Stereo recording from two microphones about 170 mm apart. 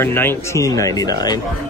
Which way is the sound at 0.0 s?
15° left (ahead or behind).